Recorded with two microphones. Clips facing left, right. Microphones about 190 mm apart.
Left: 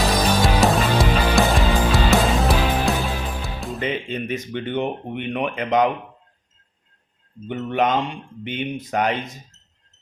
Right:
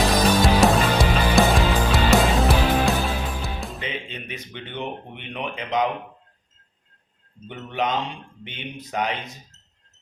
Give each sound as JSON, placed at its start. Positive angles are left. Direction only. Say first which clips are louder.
{"t": 0.4, "sound": "music", "louder": "even", "side_deg": 0}
{"t": 3.8, "sound": "speech", "louder": "left 7 dB", "side_deg": 45}
{"t": 7.4, "sound": "speech", "louder": "left 5 dB", "side_deg": 55}